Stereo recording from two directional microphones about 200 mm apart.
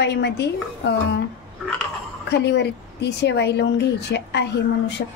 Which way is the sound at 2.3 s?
60° left (ahead or behind).